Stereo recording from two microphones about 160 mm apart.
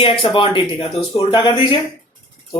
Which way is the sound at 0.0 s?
30° left (ahead or behind).